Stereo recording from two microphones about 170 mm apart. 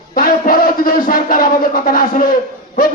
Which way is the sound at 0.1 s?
55° left (ahead or behind).